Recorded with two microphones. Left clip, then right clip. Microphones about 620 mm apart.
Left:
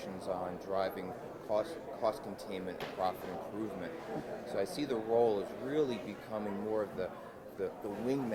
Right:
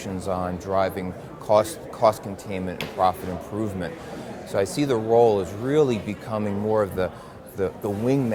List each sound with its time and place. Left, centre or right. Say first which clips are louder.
0.3 s speech: right 11 dB; right
4.5 s speech: right 13 dB; right